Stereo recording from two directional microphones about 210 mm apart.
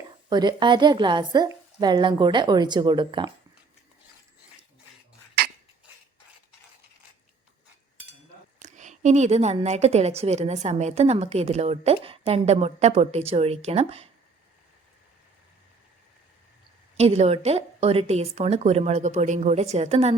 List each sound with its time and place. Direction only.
0.3 s a woman's voice: 20° right (ahead or behind)
8.5 s a woman's voice: 35° right (ahead or behind)
17.0 s a woman's voice: 30° right (ahead or behind)